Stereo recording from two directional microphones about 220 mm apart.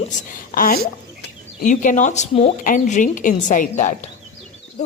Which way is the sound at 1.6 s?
35° left (ahead or behind).